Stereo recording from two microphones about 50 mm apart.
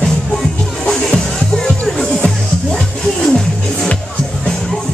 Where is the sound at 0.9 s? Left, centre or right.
Centre.